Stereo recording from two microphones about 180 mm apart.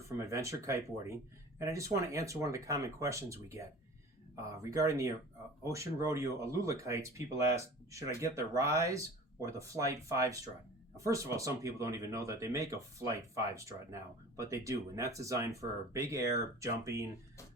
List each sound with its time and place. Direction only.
0.3 s speech: 15° right (ahead or behind)